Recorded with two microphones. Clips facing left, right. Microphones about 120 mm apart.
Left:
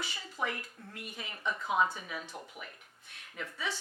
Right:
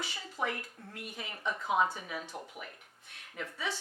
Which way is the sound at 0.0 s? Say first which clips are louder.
Even; 60° right (ahead or behind).